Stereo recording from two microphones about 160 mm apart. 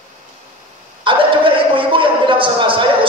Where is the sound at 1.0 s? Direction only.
30° right (ahead or behind).